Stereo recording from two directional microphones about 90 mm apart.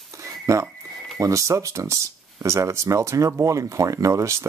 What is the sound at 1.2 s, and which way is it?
Speech, 35° right (ahead or behind).